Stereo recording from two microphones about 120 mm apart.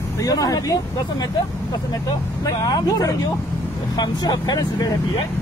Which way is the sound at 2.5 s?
35° left (ahead or behind).